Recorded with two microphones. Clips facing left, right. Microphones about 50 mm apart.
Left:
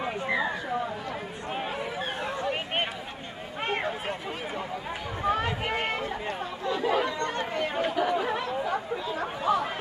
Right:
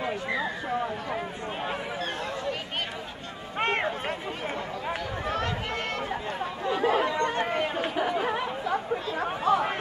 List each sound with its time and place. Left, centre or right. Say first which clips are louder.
5.3 s chatter: left 3 dB; centre
6.8 s chatter: right 2 dB; right
7.1 s chatter: right 3 dB; right
9.2 s speech: right 2 dB; centre